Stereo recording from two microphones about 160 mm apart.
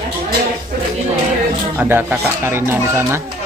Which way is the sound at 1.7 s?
10° right (ahead or behind).